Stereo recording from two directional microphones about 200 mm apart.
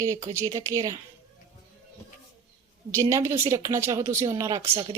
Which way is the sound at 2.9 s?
15° right (ahead or behind).